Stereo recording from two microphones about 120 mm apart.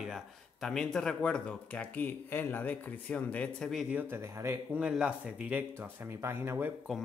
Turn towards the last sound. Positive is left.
turn(degrees=-20)  # may be behind; listen again after turning